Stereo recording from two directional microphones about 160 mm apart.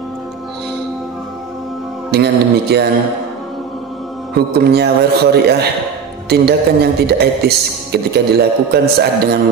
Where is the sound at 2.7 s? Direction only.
90° right.